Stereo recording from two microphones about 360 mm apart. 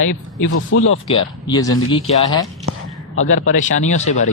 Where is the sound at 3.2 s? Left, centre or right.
Left.